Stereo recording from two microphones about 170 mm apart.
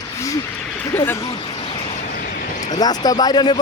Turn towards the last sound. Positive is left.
turn(degrees=25)  # may be behind; listen again after turning